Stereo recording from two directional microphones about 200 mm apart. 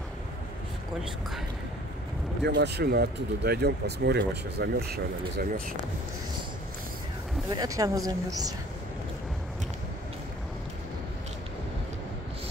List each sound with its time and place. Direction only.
2.4 s speech: 55° right (ahead or behind)
7.4 s speech: 15° right (ahead or behind)